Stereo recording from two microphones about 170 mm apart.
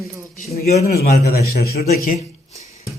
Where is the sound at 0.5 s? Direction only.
65° left (ahead or behind).